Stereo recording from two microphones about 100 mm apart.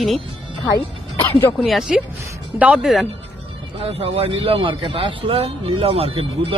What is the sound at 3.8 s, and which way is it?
A man's voice, 90° right.